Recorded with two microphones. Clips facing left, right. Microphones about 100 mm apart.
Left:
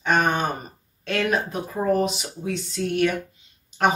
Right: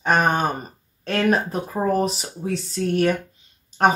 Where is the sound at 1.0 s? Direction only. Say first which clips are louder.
Right 3 dB; 40° right (ahead or behind).